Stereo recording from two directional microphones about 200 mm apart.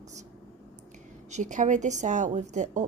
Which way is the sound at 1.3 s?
40° right (ahead or behind).